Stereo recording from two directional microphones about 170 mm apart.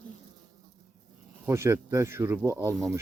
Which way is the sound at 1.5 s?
15° right (ahead or behind).